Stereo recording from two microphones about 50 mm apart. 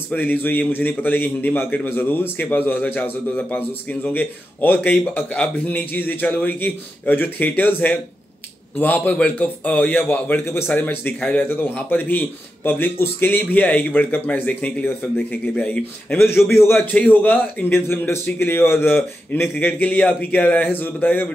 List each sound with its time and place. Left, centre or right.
0.1 s a man's voice: left
10.3 s a man's voice: left
13.7 s a man's voice: left
16.4 s a man's voice: left
16.7 s a man's voice: left
17.7 s a man's voice: left
19.6 s a man's voice: left